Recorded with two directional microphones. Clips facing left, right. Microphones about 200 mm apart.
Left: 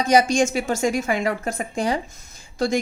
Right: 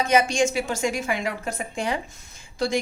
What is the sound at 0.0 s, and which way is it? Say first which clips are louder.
A woman's voice: left 3 dB; 35° left (ahead or behind).